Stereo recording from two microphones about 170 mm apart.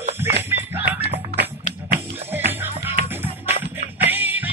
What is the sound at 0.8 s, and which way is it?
Music, 75° right (ahead or behind).